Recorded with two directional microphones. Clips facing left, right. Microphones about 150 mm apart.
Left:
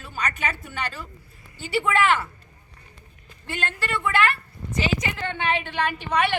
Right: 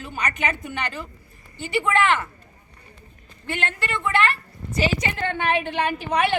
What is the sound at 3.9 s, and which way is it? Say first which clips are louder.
Speech: even; centre (ahead or behind).